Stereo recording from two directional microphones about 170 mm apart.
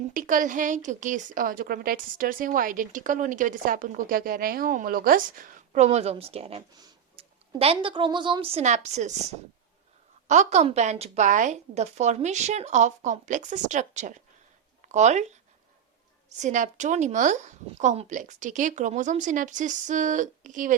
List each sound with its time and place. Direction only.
0.1 s a woman's voice: 50° right (ahead or behind)
10.2 s a woman's voice: 45° right (ahead or behind)
16.4 s a woman's voice: 45° right (ahead or behind)